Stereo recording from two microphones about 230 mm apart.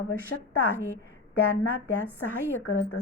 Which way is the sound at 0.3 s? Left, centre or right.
Left.